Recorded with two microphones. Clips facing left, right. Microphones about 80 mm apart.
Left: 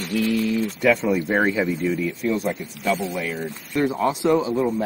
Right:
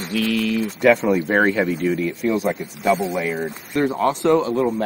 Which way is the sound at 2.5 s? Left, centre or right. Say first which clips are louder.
Right 4 dB; right.